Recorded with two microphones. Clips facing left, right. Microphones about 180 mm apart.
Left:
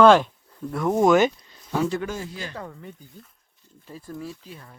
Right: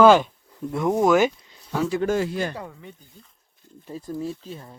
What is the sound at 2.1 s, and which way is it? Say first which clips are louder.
Speech: right 10 dB; 65° right (ahead or behind).